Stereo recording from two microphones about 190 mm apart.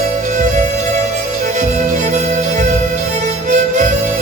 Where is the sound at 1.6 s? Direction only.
40° right (ahead or behind).